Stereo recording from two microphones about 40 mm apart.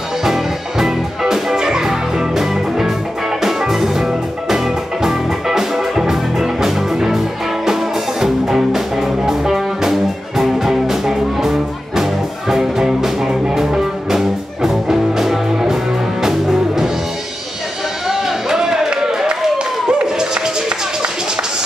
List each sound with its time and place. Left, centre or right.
0.2 s music: centre
18.0 s a sound: centre
19.9 s music: centre